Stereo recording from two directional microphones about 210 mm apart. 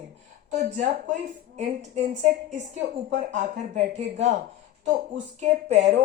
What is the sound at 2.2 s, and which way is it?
A man's voice, 35° right (ahead or behind).